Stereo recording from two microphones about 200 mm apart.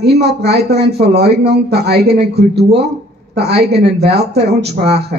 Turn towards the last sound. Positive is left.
turn(degrees=-55)  # may be behind; listen again after turning